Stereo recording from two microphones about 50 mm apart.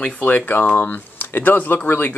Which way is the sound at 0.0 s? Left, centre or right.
Left.